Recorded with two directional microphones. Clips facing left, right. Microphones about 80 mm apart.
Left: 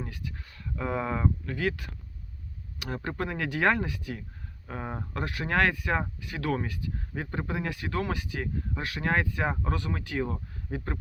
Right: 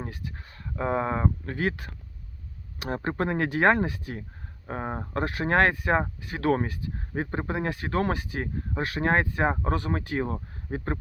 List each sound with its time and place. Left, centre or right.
0.0 s speech: right